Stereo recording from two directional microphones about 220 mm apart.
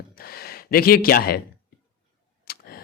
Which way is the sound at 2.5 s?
45° left (ahead or behind).